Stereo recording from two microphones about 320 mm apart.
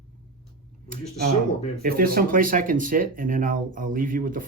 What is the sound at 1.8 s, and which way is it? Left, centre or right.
Speech, right.